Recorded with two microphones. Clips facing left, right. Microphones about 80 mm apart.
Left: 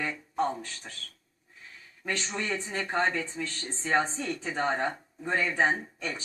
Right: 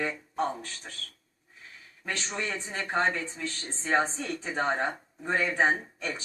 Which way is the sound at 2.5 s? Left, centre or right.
Centre.